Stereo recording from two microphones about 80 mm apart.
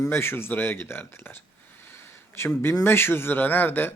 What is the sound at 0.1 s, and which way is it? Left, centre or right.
Speech, left.